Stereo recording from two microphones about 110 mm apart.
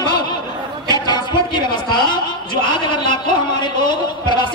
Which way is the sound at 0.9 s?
40° left (ahead or behind).